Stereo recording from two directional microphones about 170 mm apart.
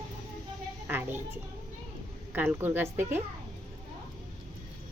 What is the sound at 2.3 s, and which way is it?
Speech, 10° right (ahead or behind).